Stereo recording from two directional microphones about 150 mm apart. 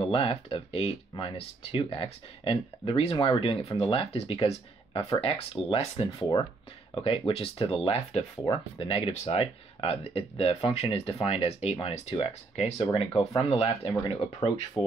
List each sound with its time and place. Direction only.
0.0 s speech: 40° left (ahead or behind)